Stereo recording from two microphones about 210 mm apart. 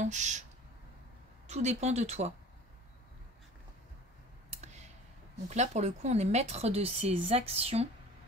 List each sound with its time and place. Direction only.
0.0 s speech: 35° right (ahead or behind)
1.5 s speech: 35° right (ahead or behind)
4.5 s clicking: 30° right (ahead or behind)
5.5 s speech: 30° right (ahead or behind)